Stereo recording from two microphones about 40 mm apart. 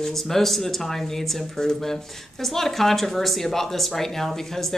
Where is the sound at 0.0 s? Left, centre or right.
Centre.